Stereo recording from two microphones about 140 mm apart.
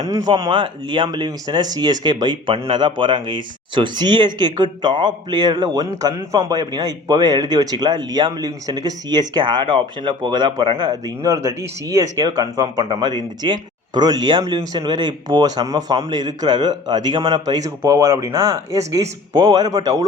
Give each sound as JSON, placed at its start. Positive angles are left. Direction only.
{"t": 0.0, "sound": "speech", "side_deg": -30}